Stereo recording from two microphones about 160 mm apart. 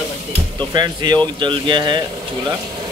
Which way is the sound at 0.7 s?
25° right (ahead or behind).